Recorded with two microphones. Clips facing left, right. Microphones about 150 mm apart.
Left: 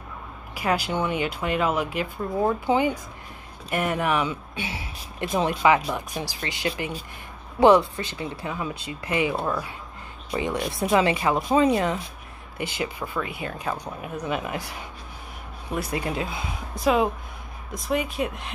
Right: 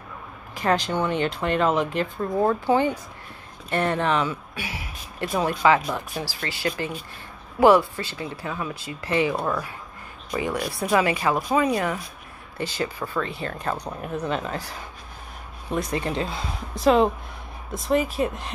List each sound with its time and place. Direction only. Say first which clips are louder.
0.6 s speech: right 2 dB; 10° left (ahead or behind)